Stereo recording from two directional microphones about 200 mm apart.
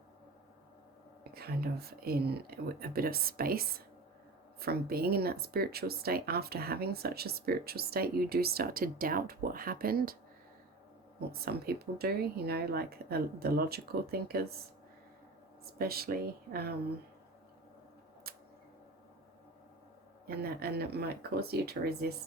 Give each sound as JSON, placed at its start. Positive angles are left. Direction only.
{"t": 1.3, "sound": "speech", "side_deg": -50}
{"t": 11.2, "sound": "speech", "side_deg": -50}
{"t": 15.6, "sound": "speech", "side_deg": -50}
{"t": 18.3, "sound": "a sound", "side_deg": -50}
{"t": 20.2, "sound": "speech", "side_deg": -50}